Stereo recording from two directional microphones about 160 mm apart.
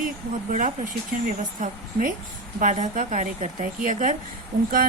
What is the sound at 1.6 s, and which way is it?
A woman's voice, 60° right (ahead or behind).